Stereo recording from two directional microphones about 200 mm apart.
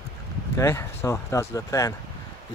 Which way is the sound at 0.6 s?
15° left (ahead or behind).